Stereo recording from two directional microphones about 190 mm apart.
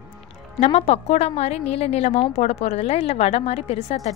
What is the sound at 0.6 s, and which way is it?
A woman's voice, 35° left (ahead or behind).